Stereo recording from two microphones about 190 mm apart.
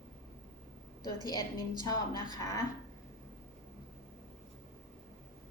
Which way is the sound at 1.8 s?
20° left (ahead or behind).